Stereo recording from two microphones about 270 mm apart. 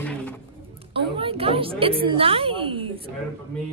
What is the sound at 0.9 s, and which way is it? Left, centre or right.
A woman's voice, centre.